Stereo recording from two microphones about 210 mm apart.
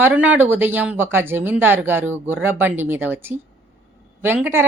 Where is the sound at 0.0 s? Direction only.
10° right (ahead or behind).